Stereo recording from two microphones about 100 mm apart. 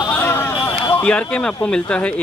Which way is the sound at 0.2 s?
20° left (ahead or behind).